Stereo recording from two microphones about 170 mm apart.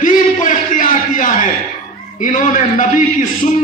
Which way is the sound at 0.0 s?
50° left (ahead or behind).